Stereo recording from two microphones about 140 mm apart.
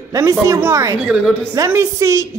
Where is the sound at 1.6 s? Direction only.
20° right (ahead or behind).